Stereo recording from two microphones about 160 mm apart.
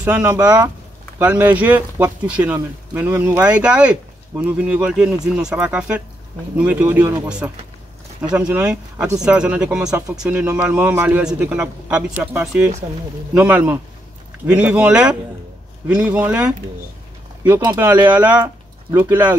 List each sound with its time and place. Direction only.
0.0 s speech: 15° right (ahead or behind)
1.2 s speech: 10° right (ahead or behind)
14.4 s speech: 5° right (ahead or behind)